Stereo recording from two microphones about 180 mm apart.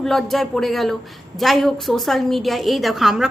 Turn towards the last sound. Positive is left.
turn(degrees=0)  # may be behind; listen again after turning